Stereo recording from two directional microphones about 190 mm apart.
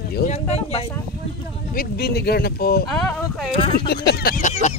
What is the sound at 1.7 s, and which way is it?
Speech, 55° left (ahead or behind).